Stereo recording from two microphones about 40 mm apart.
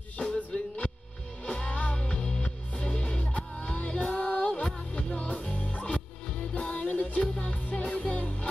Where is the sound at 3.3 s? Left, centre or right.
Left.